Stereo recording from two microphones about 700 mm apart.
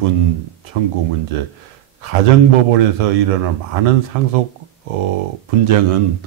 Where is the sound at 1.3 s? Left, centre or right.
Right.